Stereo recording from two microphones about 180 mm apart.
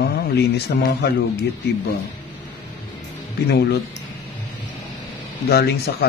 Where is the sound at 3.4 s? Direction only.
65° left (ahead or behind).